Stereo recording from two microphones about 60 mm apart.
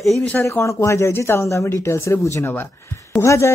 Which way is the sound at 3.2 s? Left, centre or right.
Left.